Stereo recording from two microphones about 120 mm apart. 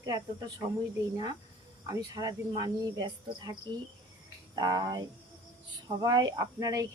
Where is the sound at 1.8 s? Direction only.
30° right (ahead or behind).